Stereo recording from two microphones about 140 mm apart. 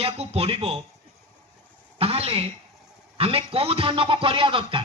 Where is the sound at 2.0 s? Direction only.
45° right (ahead or behind).